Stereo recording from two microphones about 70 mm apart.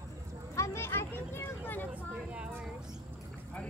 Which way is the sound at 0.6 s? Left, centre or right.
Left.